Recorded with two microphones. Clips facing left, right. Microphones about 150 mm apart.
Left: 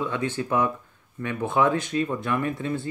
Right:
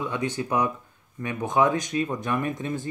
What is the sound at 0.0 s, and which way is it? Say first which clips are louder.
Speech: left 1 dB; 15° right (ahead or behind).